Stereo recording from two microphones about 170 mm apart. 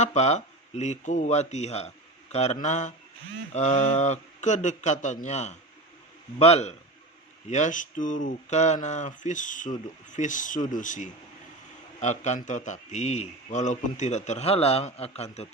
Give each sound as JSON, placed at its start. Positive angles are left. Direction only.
{"t": 0.0, "sound": "a man's voice", "side_deg": 45}